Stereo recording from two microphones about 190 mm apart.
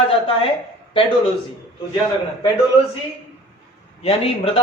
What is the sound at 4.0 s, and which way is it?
Speech, 30° left (ahead or behind).